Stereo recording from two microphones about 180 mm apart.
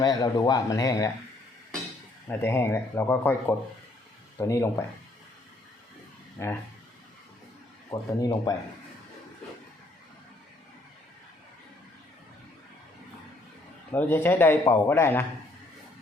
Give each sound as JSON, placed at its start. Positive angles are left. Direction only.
{"t": 0.0, "sound": "speech", "side_deg": 20}
{"t": 2.3, "sound": "speech", "side_deg": 15}
{"t": 6.4, "sound": "speech", "side_deg": 15}
{"t": 7.9, "sound": "speech", "side_deg": 20}
{"t": 13.9, "sound": "speech", "side_deg": 10}